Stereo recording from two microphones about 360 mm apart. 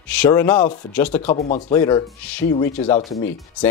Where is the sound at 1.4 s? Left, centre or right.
Centre.